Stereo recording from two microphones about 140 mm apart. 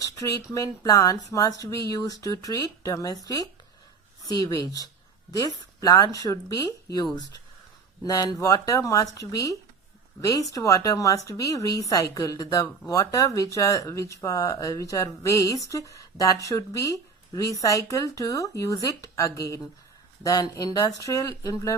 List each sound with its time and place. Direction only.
0.0 s speech: 25° left (ahead or behind)